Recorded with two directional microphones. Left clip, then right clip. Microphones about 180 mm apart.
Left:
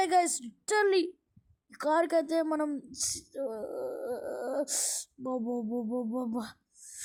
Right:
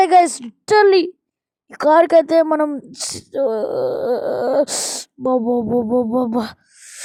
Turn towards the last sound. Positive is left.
turn(degrees=-40)  # may be behind; listen again after turning